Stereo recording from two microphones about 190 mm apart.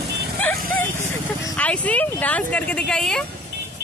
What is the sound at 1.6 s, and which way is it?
Speech, 5° left (ahead or behind).